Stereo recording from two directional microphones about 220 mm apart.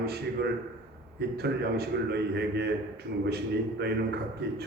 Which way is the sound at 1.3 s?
45° right (ahead or behind).